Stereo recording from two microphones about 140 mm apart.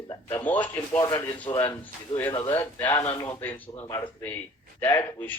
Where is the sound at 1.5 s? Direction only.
25° left (ahead or behind).